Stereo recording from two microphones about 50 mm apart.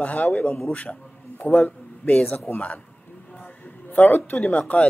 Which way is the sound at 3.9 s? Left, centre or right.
Left.